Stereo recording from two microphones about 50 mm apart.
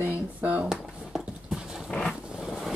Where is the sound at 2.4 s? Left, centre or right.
Centre.